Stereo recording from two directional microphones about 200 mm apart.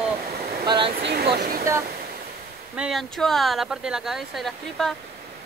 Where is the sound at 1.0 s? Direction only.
55° right (ahead or behind).